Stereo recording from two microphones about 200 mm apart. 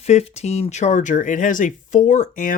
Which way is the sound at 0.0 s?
30° left (ahead or behind).